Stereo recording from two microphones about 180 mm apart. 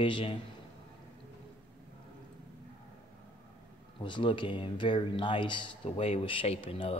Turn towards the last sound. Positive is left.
turn(degrees=30)  # may be behind; listen again after turning